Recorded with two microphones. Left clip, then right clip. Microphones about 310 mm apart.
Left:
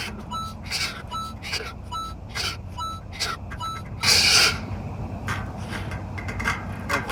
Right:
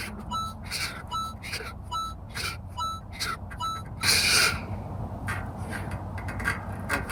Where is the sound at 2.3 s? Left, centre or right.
Centre.